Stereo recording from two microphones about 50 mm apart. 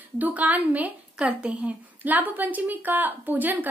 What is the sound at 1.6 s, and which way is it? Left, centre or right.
A woman's voice, right.